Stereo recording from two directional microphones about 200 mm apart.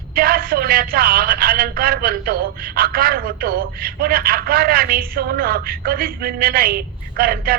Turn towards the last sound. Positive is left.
turn(degrees=-50)  # may be behind; listen again after turning